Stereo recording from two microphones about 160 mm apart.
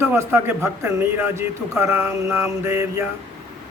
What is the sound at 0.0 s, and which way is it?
Speech, 15° right (ahead or behind).